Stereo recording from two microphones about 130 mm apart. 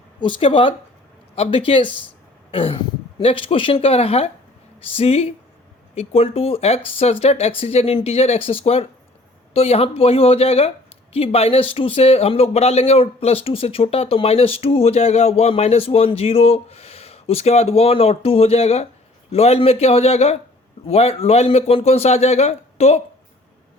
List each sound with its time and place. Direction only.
0.2 s speech: 40° left (ahead or behind)
2.5 s a sound: 45° left (ahead or behind)
3.2 s a man's voice: 45° left (ahead or behind)